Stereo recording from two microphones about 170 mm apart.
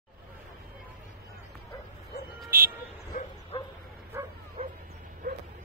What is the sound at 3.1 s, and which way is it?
Bow-wow, 60° left (ahead or behind).